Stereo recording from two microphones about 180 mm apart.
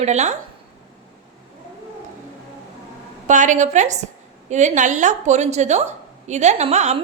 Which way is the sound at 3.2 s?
45° right (ahead or behind).